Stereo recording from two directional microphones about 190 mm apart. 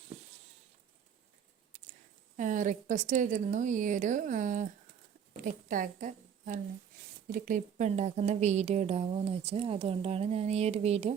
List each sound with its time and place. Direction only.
2.3 s a woman's voice: 40° right (ahead or behind)